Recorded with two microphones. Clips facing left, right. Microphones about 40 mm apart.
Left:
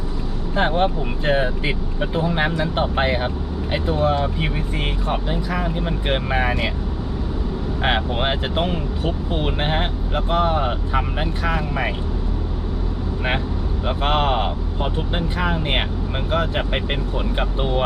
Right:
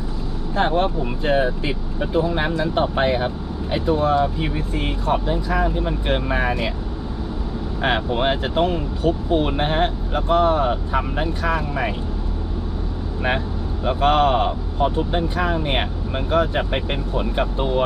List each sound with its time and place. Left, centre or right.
0.5 s speech: left
7.8 s speech: centre
13.8 s speech: centre